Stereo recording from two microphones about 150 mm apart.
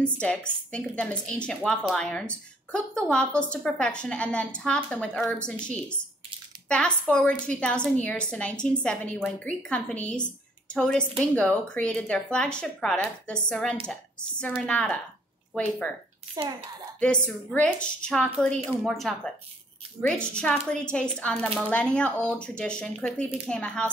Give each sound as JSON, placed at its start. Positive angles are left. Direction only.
{"t": 0.0, "sound": "a woman's voice", "side_deg": 5}
{"t": 16.4, "sound": "speech", "side_deg": -25}
{"t": 17.0, "sound": "a woman's voice", "side_deg": 5}